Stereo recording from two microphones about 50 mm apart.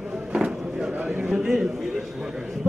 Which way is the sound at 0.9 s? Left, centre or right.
Right.